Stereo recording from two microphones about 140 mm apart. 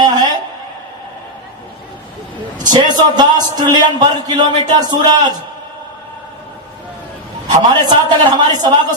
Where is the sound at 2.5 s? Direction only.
30° right (ahead or behind).